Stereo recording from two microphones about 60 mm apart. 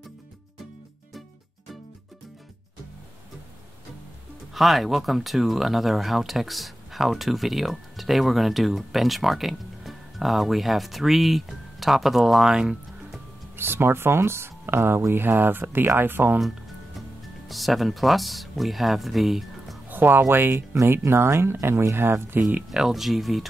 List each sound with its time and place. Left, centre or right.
4.6 s speech: centre
13.6 s speech: right
17.5 s speech: centre
19.9 s speech: right
22.7 s speech: centre